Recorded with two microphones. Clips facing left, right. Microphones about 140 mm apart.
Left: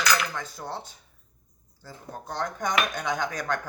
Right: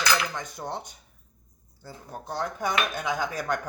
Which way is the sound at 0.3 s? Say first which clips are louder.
Right 1 dB; 20° right (ahead or behind).